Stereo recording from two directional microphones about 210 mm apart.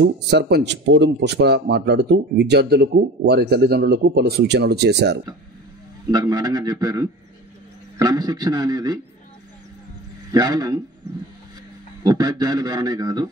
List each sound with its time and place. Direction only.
0.0 s speech: 50° right (ahead or behind)
6.0 s a man's voice: 20° right (ahead or behind)
10.3 s a man's voice: 20° right (ahead or behind)
12.0 s speech: 20° right (ahead or behind)